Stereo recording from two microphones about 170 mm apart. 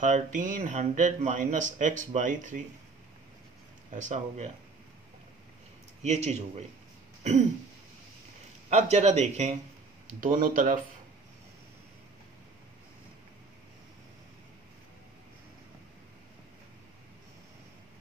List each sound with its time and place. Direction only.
0.0 s speech: 45° right (ahead or behind)
3.9 s speech: 45° right (ahead or behind)
6.0 s speech: 40° right (ahead or behind)
8.6 s speech: 40° right (ahead or behind)
10.2 s speech: 55° right (ahead or behind)